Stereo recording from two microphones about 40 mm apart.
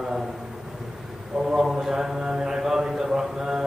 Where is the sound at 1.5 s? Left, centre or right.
Centre.